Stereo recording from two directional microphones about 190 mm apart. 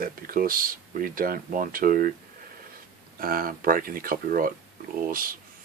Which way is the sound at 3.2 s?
50° right (ahead or behind).